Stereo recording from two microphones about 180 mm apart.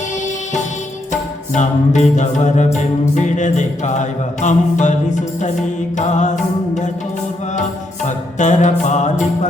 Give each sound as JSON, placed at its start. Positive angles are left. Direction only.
{"t": 1.5, "sound": "music", "side_deg": 40}
{"t": 8.0, "sound": "music", "side_deg": 40}